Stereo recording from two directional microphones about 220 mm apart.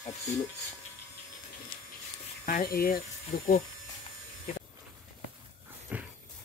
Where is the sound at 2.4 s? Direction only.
40° left (ahead or behind).